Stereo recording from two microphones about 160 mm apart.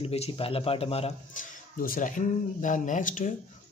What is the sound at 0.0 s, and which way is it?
Speech, 40° left (ahead or behind).